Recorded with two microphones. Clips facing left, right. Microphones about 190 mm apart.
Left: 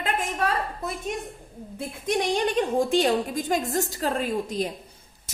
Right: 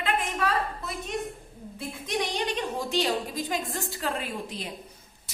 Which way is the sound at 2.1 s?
50° left (ahead or behind).